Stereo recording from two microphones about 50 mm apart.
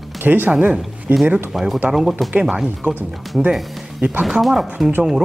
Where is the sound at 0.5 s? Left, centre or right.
Right.